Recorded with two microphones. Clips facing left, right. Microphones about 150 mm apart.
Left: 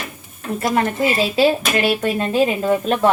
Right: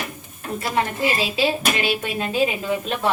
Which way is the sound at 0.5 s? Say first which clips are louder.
Left 5 dB; 45° left (ahead or behind).